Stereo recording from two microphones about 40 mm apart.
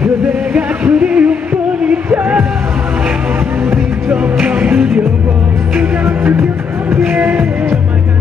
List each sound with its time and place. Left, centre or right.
0.0 s music: right
4.4 s music: right
6.0 s music: right
7.1 s music: right